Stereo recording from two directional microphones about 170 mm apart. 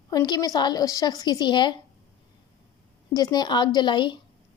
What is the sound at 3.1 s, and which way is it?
Speech, 25° left (ahead or behind).